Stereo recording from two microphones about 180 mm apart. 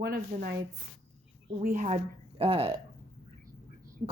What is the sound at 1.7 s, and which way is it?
A woman's voice, 35° right (ahead or behind).